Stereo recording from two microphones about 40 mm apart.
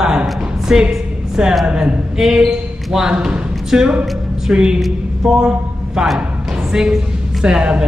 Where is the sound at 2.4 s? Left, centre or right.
Centre.